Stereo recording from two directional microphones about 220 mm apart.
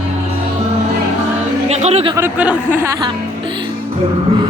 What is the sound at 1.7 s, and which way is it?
Music, 30° right (ahead or behind).